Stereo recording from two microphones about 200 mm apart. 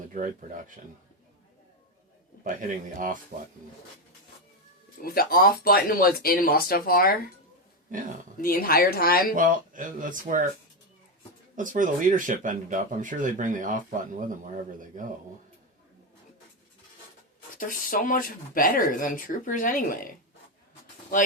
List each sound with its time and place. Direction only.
0.1 s speech: 40° right (ahead or behind)
2.4 s speech: 40° right (ahead or behind)
5.0 s speech: 45° left (ahead or behind)
8.4 s speech: 45° left (ahead or behind)
9.3 s speech: 40° right (ahead or behind)
11.5 s speech: 40° right (ahead or behind)
17.6 s speech: 45° left (ahead or behind)